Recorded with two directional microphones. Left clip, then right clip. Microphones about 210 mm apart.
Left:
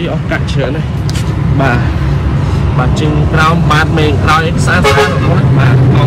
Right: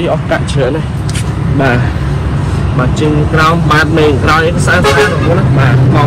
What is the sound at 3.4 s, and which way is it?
Speech, 20° left (ahead or behind).